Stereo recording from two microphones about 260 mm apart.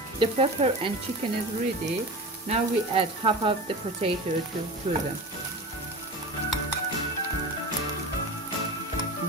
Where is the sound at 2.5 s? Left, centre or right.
Right.